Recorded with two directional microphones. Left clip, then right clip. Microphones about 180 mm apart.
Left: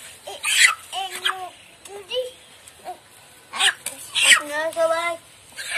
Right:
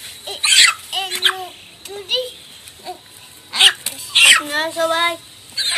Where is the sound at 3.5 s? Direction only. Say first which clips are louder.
Right 8 dB; 5° left (ahead or behind).